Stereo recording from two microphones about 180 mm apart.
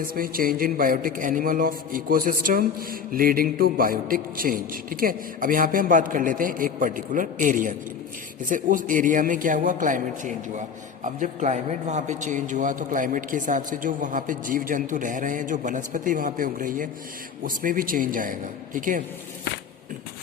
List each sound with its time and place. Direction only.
0.0 s a man's voice: 55° right (ahead or behind)